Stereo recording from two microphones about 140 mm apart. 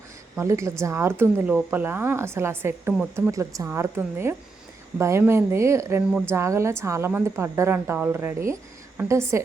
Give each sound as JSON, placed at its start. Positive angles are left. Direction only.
{"t": 0.3, "sound": "a woman's voice", "side_deg": -20}